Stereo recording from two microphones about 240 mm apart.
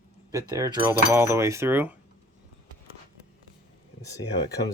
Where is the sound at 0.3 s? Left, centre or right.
Centre.